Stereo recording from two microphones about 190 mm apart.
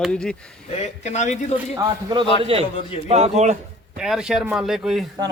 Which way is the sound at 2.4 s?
30° right (ahead or behind).